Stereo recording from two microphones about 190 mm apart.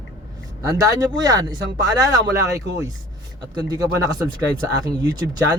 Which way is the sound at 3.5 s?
20° right (ahead or behind).